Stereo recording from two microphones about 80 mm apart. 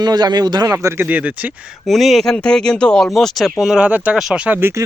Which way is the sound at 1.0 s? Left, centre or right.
Centre.